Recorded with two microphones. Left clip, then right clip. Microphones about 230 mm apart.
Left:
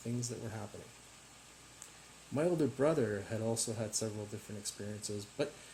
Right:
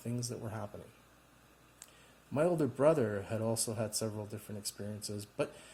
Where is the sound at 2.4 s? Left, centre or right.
Right.